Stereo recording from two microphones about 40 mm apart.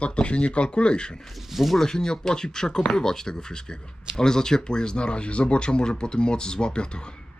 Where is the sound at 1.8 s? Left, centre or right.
Centre.